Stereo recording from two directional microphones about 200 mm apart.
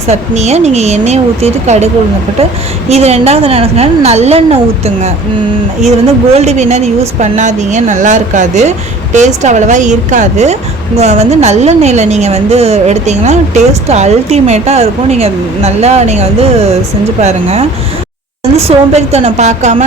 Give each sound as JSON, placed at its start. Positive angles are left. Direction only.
{"t": 0.1, "sound": "a woman's voice", "side_deg": -35}
{"t": 2.9, "sound": "a woman's voice", "side_deg": -30}
{"t": 6.3, "sound": "a woman's voice", "side_deg": -35}